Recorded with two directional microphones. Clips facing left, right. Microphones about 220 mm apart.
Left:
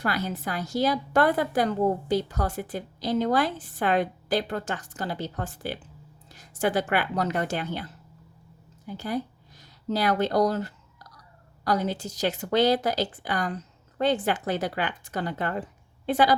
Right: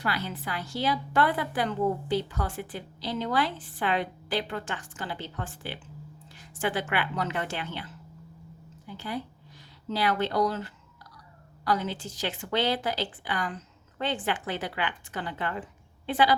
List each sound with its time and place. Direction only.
0.0 s a woman's voice: 45° left (ahead or behind)